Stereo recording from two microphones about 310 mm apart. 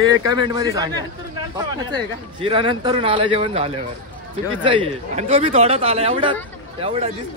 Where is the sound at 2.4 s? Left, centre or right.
Centre.